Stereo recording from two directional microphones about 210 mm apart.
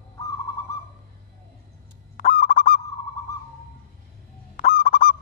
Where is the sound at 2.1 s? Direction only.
40° left (ahead or behind).